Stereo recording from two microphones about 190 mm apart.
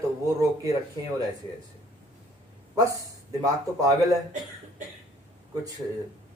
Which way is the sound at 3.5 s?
15° right (ahead or behind).